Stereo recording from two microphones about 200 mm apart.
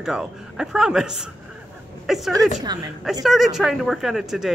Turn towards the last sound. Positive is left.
turn(degrees=0)  # may be behind; listen again after turning